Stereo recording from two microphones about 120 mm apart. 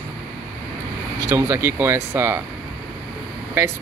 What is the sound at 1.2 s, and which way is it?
Speech, 20° right (ahead or behind).